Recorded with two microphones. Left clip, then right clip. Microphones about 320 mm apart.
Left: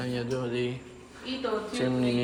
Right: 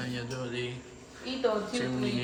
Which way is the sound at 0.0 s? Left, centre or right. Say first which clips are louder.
Left 5 dB; centre.